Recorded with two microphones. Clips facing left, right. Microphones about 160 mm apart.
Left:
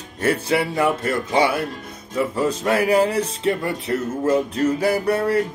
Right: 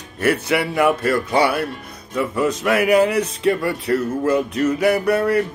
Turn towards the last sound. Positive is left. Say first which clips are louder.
# right 2 dB
turn(degrees=30)  # may be behind; listen again after turning